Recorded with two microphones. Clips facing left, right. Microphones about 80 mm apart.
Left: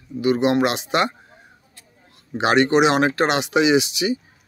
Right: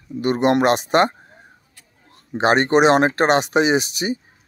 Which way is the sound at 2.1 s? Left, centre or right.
Right.